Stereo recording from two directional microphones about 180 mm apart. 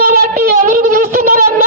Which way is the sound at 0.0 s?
55° right (ahead or behind).